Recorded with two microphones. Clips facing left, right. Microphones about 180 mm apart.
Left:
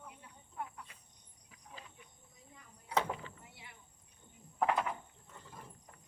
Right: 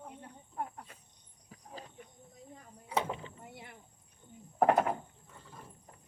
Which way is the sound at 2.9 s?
20° right (ahead or behind).